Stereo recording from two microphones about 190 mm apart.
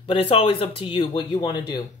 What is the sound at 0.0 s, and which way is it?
Speech, 30° left (ahead or behind).